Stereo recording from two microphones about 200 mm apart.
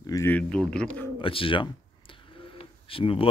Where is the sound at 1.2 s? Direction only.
25° left (ahead or behind).